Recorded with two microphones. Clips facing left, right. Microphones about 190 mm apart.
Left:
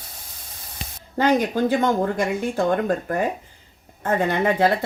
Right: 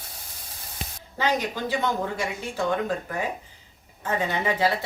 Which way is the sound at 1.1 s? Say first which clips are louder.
Left 7 dB; 50° left (ahead or behind).